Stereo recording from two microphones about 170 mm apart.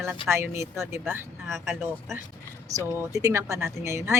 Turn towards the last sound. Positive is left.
turn(degrees=-15)  # may be behind; listen again after turning